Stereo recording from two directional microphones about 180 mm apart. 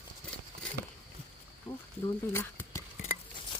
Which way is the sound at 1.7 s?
20° left (ahead or behind).